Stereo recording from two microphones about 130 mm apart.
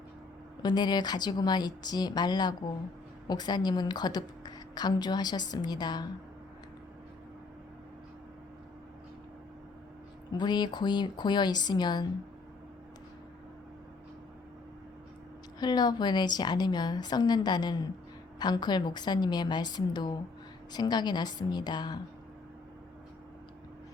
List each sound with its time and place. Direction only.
0.6 s a woman's voice: 30° left (ahead or behind)
10.3 s a woman's voice: 35° left (ahead or behind)
15.6 s a woman's voice: 35° left (ahead or behind)